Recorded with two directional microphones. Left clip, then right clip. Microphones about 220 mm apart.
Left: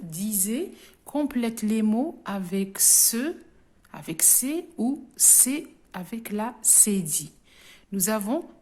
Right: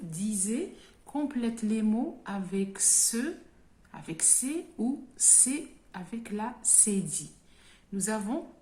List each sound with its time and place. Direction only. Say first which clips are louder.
0.1 s a woman's voice: left 4 dB; 45° left (ahead or behind)